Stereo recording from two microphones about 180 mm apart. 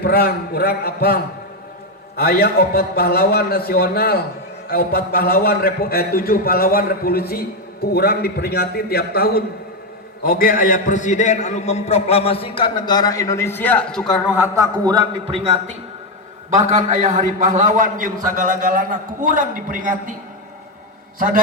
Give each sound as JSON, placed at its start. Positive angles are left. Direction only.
{"t": 0.0, "sound": "a man's voice", "side_deg": 60}
{"t": 14.3, "sound": "a man's voice", "side_deg": -15}
{"t": 15.2, "sound": "a man's voice", "side_deg": -35}
{"t": 21.2, "sound": "a man's voice", "side_deg": -50}